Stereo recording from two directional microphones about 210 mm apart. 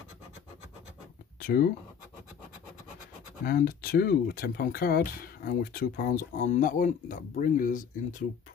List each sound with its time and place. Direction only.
1.4 s speech: 45° left (ahead or behind)
3.4 s speech: 45° left (ahead or behind)